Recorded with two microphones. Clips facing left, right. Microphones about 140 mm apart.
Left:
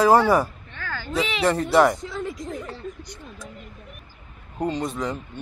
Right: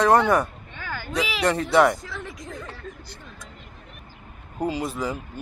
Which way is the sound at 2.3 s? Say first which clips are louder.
Left 5 dB; centre (ahead or behind).